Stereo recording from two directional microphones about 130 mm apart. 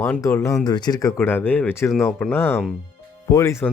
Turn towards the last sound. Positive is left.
turn(degrees=25)  # may be behind; listen again after turning